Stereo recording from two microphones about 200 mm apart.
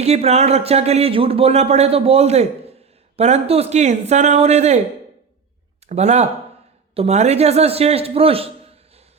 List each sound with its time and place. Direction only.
0.0 s speech: 30° right (ahead or behind)
5.9 s speech: 35° right (ahead or behind)